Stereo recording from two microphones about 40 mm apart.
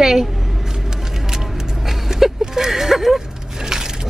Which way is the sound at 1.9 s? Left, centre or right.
Centre.